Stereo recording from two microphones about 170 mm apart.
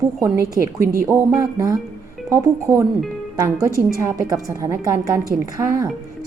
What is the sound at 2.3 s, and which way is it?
Speech, 15° right (ahead or behind).